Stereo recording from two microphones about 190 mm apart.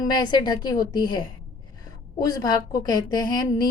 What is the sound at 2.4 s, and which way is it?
Speech, 20° left (ahead or behind).